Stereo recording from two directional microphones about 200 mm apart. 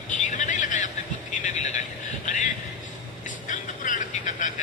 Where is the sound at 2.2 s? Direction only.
40° left (ahead or behind).